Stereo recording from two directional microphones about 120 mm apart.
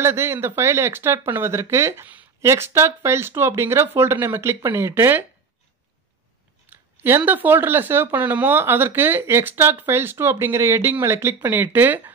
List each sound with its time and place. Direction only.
0.0 s speech: 20° right (ahead or behind)
7.0 s speech: 15° right (ahead or behind)